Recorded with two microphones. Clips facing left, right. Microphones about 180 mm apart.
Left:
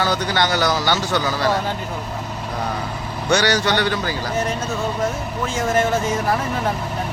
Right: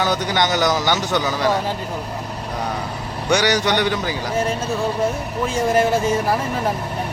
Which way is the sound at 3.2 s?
15° right (ahead or behind).